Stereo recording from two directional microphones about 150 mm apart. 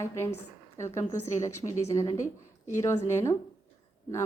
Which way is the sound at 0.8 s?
20° left (ahead or behind).